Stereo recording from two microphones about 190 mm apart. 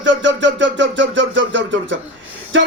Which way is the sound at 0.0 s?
70° right (ahead or behind).